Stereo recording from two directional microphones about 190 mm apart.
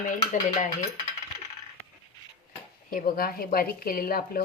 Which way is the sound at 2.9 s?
50° left (ahead or behind).